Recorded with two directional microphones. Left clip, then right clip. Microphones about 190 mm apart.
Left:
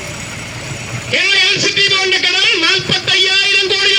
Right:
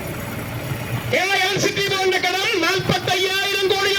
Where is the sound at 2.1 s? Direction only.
15° left (ahead or behind).